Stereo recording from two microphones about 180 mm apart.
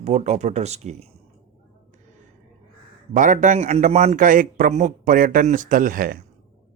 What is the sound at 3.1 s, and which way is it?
A man's voice, 45° right (ahead or behind).